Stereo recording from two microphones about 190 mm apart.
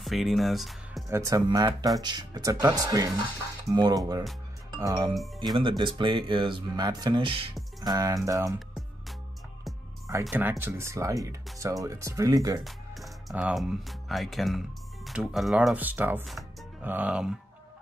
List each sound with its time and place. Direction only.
0.0 s speech: centre (ahead or behind)
1.0 s speech: 15° right (ahead or behind)
10.2 s speech: 5° right (ahead or behind)
12.6 s speech: centre (ahead or behind)